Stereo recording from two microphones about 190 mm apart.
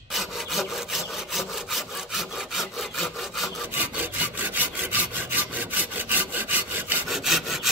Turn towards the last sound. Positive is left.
turn(degrees=0)  # may be behind; listen again after turning